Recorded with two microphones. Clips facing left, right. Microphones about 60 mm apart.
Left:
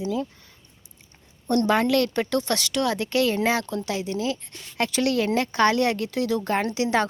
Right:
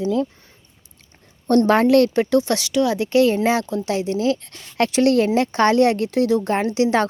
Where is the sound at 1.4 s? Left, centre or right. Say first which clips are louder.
Right 6 dB; right.